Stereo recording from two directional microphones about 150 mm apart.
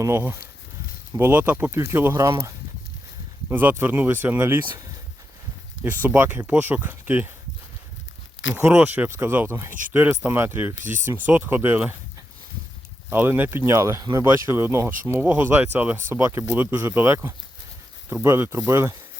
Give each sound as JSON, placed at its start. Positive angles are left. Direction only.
{"t": 0.0, "sound": "speech", "side_deg": -15}
{"t": 3.5, "sound": "speech", "side_deg": -10}
{"t": 5.8, "sound": "speech", "side_deg": -10}
{"t": 8.6, "sound": "speech", "side_deg": -10}
{"t": 13.1, "sound": "speech", "side_deg": -15}